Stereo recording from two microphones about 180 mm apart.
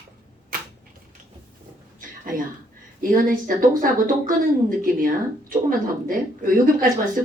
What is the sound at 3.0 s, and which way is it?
Speech, 50° right (ahead or behind).